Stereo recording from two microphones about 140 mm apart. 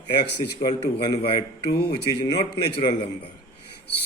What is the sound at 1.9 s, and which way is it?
Speech, 30° left (ahead or behind).